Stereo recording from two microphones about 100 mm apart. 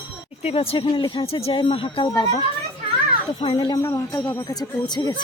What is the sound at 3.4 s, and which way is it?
Speech, 50° left (ahead or behind).